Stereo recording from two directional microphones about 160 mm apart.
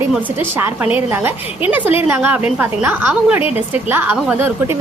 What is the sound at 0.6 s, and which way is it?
A woman's voice, 10° right (ahead or behind).